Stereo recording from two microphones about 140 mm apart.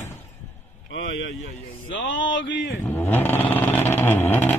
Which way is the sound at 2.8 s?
15° left (ahead or behind).